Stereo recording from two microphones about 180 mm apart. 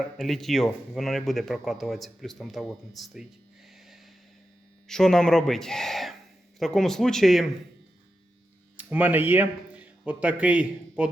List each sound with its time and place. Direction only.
0.2 s speech: centre (ahead or behind)
4.9 s speech: 5° left (ahead or behind)
8.7 s speech: 10° right (ahead or behind)